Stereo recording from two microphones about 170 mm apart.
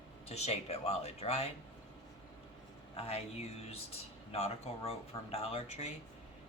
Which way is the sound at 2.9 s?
35° left (ahead or behind).